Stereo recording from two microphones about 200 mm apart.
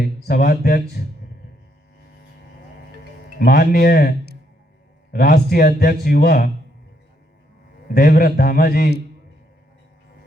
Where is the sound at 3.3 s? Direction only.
50° left (ahead or behind).